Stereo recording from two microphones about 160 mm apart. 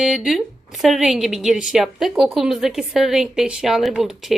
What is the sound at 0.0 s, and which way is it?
A woman's voice, centre (ahead or behind).